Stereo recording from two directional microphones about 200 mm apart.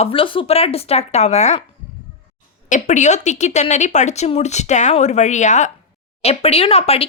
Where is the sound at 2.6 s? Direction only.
40° left (ahead or behind).